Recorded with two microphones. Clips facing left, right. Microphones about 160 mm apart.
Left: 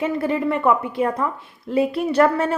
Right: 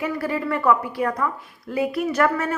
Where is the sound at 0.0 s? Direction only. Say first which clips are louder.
Left 4 dB; 25° left (ahead or behind).